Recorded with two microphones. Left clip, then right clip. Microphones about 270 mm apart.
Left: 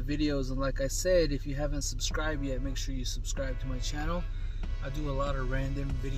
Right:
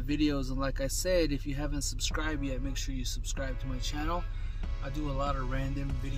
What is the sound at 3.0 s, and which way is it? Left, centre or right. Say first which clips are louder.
Speech: even; right.